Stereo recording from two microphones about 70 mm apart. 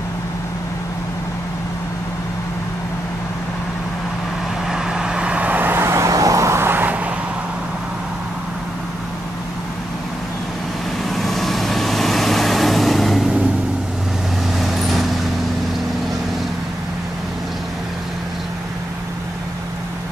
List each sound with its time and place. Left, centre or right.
4.6 s vehicle: centre; by 7.0 s right
11.1 s vehicle: centre
14.6 s vehicle: centre